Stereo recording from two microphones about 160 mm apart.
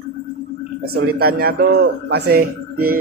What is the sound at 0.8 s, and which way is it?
A man's voice, 80° right.